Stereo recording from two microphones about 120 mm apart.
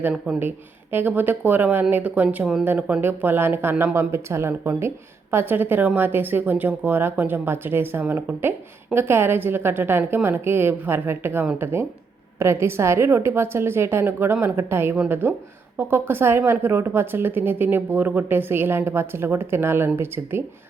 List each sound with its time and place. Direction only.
0.3 s a woman's voice: 15° right (ahead or behind)